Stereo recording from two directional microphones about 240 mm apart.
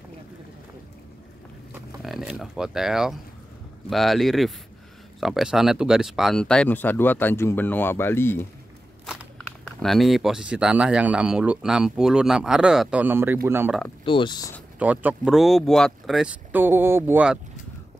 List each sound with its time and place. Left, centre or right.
1.7 s a sound: centre
3.9 s speech: centre
9.0 s a sound: centre
9.8 s speech: centre
14.0 s speech: left
14.8 s speech: centre